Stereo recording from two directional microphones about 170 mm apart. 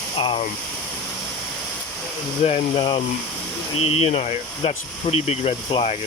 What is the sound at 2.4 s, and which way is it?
Speech, 35° left (ahead or behind).